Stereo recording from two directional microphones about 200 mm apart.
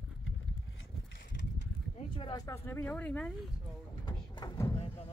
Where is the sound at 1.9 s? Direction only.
25° left (ahead or behind); by 3.3 s 5° left (ahead or behind).